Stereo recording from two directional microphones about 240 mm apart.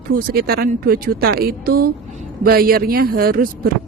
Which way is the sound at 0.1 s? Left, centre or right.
Right.